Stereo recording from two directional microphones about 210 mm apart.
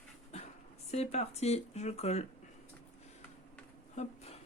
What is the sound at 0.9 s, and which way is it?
Speech, 30° left (ahead or behind).